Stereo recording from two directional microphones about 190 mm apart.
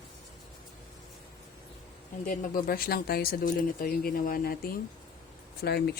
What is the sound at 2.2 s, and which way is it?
Speech, 45° left (ahead or behind).